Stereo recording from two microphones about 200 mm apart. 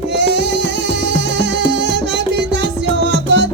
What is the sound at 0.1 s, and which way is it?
Music, 60° right (ahead or behind).